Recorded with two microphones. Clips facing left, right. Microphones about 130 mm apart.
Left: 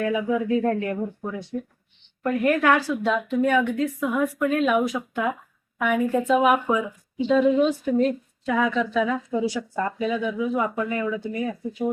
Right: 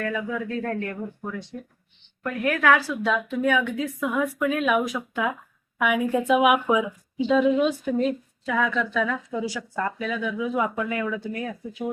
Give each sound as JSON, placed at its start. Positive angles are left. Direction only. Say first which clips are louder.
{"t": 0.0, "sound": "speech", "louder": "left 5 dB", "side_deg": 15}
{"t": 2.4, "sound": "a woman's voice", "louder": "even", "side_deg": 0}
{"t": 10.5, "sound": "a woman's voice", "louder": "left 1 dB", "side_deg": -5}